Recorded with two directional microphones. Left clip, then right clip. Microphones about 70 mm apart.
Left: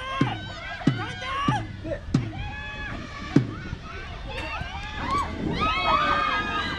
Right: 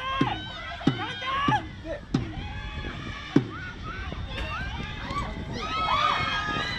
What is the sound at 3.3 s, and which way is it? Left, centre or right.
Rowboat, right.